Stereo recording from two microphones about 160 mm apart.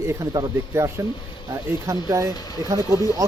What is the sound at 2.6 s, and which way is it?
Speech, 20° right (ahead or behind).